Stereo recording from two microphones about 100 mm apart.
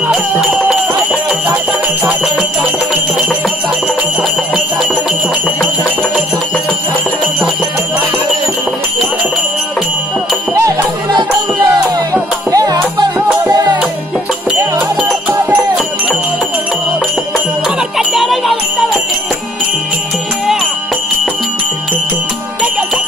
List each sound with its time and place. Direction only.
0.1 s music: 5° right (ahead or behind)
12.4 s music: 35° right (ahead or behind)
14.6 s music: 10° right (ahead or behind)
17.9 s music: centre (ahead or behind)